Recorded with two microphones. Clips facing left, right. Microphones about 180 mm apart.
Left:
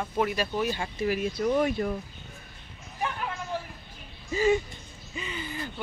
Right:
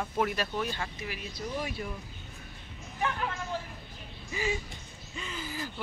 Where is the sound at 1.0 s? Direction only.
45° left (ahead or behind).